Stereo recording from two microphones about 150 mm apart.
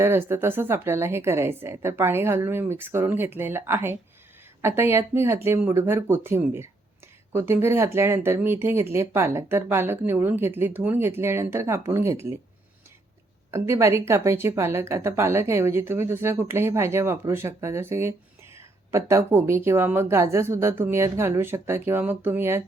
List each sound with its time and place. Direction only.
0.0 s speech: 15° right (ahead or behind)
13.5 s speech: 20° right (ahead or behind)